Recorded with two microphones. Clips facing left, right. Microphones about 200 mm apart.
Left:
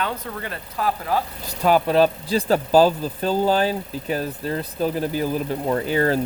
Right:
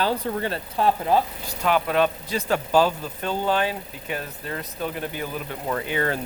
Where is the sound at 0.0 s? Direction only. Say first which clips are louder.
Right 4 dB; 30° right (ahead or behind).